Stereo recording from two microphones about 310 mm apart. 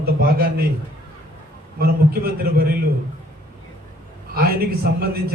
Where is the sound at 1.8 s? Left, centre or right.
Right.